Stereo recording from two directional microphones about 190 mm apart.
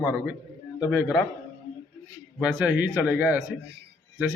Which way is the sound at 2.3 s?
5° right (ahead or behind).